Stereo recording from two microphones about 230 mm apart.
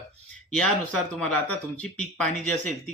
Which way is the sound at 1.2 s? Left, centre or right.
Centre.